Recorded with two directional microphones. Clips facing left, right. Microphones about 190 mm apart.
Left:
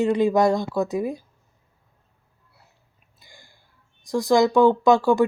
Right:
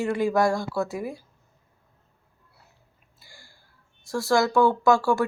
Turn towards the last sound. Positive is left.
turn(degrees=20)  # may be behind; listen again after turning